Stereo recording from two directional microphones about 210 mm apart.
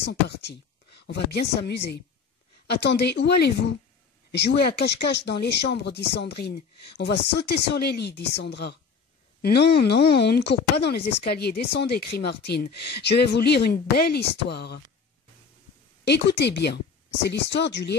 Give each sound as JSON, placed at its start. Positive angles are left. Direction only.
{"t": 0.0, "sound": "speech", "side_deg": 55}
{"t": 16.0, "sound": "speech", "side_deg": 55}